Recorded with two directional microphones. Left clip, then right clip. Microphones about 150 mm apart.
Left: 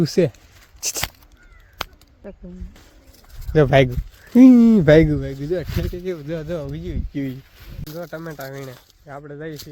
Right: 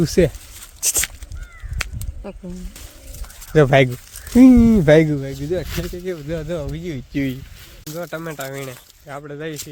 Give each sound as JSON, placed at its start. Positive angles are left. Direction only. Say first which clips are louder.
{"t": 0.0, "sound": "speech", "louder": "right 2 dB", "side_deg": 0}
{"t": 0.8, "sound": "a sound", "louder": "right 5 dB", "side_deg": 0}
{"t": 3.5, "sound": "speech", "louder": "right 1 dB", "side_deg": 0}
{"t": 4.4, "sound": "speech", "louder": "even", "side_deg": 20}
{"t": 7.1, "sound": "speech", "louder": "right 5 dB", "side_deg": -30}
{"t": 8.0, "sound": "speech", "louder": "right 4 dB", "side_deg": -15}